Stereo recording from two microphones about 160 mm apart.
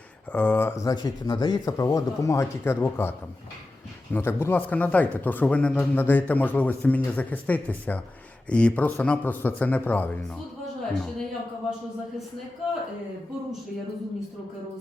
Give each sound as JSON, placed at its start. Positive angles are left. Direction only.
{"t": 0.3, "sound": "speech", "side_deg": 10}